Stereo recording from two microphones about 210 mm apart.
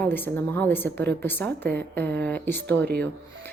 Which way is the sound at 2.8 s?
50° right (ahead or behind).